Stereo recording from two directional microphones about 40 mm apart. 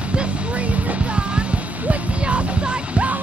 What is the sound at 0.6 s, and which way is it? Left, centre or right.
Music, right.